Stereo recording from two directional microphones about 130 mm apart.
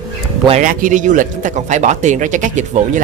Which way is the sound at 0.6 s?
85° right.